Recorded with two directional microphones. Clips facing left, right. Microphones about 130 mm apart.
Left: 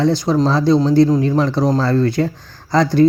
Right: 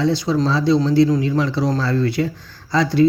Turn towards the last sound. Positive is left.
turn(degrees=55)  # may be behind; listen again after turning